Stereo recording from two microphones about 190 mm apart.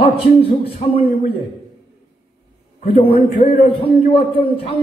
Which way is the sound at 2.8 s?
30° left (ahead or behind).